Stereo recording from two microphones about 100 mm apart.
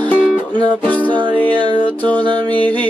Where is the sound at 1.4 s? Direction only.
50° right (ahead or behind).